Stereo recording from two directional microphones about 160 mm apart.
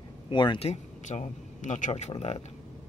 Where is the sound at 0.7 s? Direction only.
45° left (ahead or behind).